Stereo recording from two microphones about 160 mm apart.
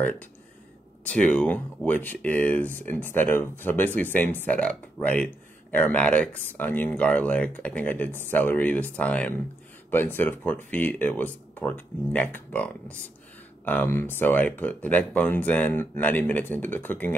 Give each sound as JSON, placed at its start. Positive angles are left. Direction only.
{"t": 1.0, "sound": "speech", "side_deg": 5}